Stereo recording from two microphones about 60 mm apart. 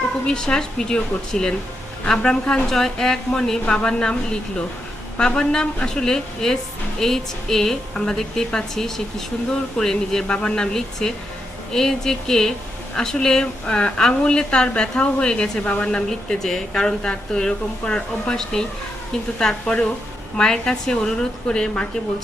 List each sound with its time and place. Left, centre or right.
0.3 s speech: centre